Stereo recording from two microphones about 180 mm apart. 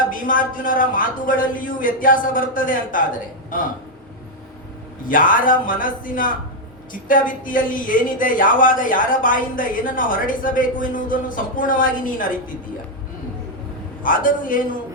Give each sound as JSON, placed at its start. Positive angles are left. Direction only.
{"t": 0.1, "sound": "a woman's voice", "side_deg": 50}
{"t": 5.0, "sound": "a woman's voice", "side_deg": 50}
{"t": 14.0, "sound": "a woman's voice", "side_deg": 50}